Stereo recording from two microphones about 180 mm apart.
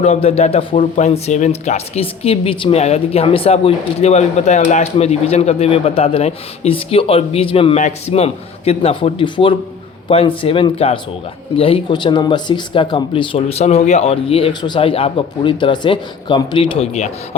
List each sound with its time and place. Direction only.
0.0 s speech: 35° left (ahead or behind)